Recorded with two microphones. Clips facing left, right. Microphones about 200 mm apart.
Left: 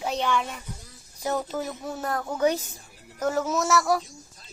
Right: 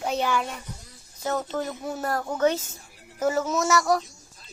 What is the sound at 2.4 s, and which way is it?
Speech, 15° left (ahead or behind).